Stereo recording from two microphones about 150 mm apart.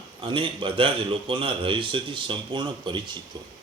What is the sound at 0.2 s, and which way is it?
Speech, 35° right (ahead or behind).